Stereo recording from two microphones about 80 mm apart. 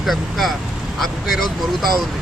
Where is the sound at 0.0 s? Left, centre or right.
Centre.